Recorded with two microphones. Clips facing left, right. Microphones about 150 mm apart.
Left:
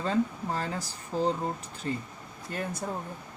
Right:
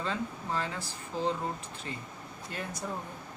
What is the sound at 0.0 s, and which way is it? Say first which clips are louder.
Speech: left 7 dB; 40° left (ahead or behind).